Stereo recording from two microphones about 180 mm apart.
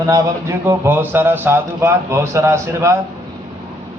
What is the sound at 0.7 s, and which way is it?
A man's voice, 10° right (ahead or behind).